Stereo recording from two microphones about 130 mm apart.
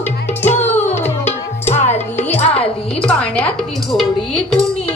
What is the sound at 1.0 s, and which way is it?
Tabla, 55° left (ahead or behind).